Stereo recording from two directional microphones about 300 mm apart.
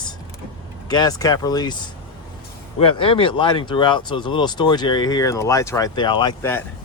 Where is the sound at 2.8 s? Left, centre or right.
Centre.